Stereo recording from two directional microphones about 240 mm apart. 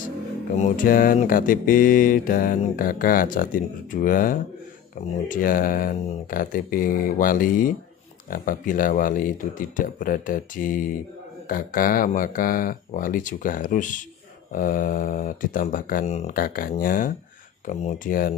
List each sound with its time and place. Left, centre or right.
0.6 s mantra: left